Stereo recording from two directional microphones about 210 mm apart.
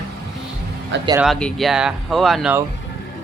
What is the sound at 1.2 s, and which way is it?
Speech, centre (ahead or behind).